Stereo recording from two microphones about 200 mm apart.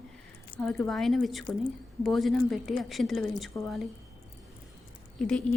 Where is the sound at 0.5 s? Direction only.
45° left (ahead or behind).